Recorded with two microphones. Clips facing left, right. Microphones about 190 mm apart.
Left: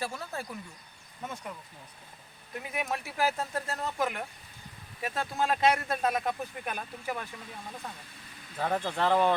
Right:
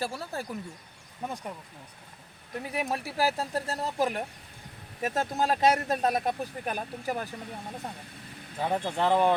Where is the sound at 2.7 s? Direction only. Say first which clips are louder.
Right 3 dB; 35° right (ahead or behind).